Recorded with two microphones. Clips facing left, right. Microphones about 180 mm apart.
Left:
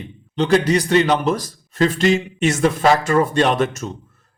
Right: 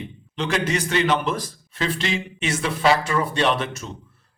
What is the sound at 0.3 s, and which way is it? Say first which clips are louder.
A man's voice: left 8 dB; 35° left (ahead or behind).